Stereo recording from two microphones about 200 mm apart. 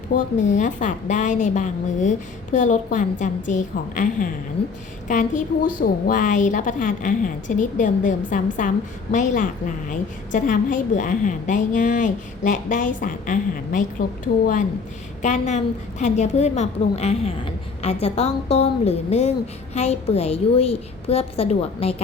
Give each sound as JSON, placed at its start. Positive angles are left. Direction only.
{"t": 0.1, "sound": "a woman's voice", "side_deg": 35}
{"t": 15.2, "sound": "a woman's voice", "side_deg": 35}